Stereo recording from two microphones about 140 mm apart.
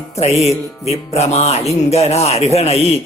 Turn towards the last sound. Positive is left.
turn(degrees=50)  # may be behind; listen again after turning